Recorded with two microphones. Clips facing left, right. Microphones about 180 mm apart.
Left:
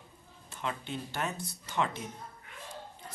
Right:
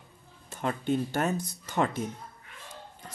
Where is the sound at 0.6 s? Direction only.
45° right (ahead or behind).